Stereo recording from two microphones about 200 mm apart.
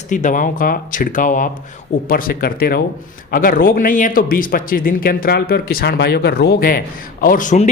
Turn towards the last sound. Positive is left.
turn(degrees=35)  # may be behind; listen again after turning